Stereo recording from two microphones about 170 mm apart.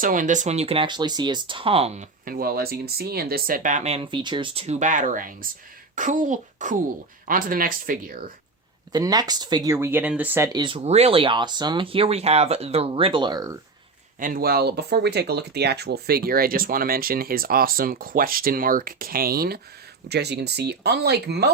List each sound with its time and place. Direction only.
0.0 s speech: 50° right (ahead or behind)
2.3 s speech: 60° right (ahead or behind)
8.9 s speech: 25° right (ahead or behind)
10.5 s speech: 25° right (ahead or behind)
14.2 s speech: 55° right (ahead or behind)
20.1 s speech: 75° right (ahead or behind)